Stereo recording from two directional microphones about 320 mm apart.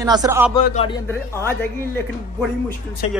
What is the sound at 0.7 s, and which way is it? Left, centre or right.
Speech, centre.